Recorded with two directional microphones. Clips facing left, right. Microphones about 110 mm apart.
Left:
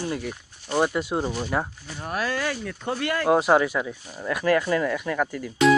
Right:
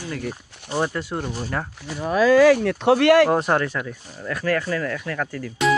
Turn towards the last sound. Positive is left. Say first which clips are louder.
# left 1 dB
turn(degrees=15)  # may be behind; listen again after turning